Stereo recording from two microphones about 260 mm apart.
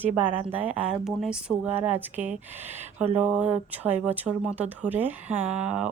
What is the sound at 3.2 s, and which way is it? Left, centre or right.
Speech, centre.